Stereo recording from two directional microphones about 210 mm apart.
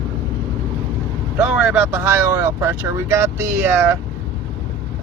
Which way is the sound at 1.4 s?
5° right (ahead or behind).